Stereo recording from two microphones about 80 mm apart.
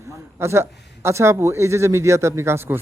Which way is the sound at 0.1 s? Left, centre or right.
Right.